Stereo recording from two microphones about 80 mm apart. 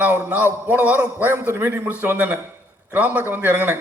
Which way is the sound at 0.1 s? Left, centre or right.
Right.